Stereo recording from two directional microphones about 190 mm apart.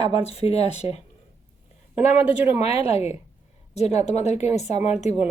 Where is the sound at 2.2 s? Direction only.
10° right (ahead or behind).